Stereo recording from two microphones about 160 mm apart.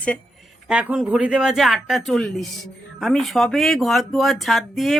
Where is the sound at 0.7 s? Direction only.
5° right (ahead or behind).